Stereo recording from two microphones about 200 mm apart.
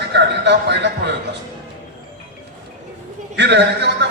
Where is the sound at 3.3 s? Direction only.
60° right (ahead or behind).